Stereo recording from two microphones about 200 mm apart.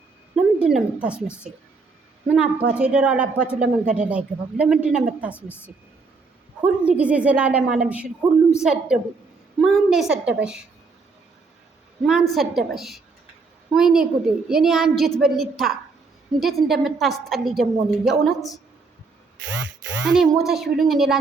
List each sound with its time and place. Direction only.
0.3 s speech: 5° right (ahead or behind)
5.3 s a woman's voice: 10° left (ahead or behind)
6.8 s a woman's voice: 5° right (ahead or behind)
12.0 s speech: centre (ahead or behind)
19.5 s a sound: 65° right (ahead or behind)
20.1 s speech: centre (ahead or behind)